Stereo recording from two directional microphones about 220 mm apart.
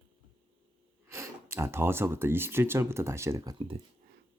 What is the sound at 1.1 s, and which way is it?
Speech, 10° right (ahead or behind).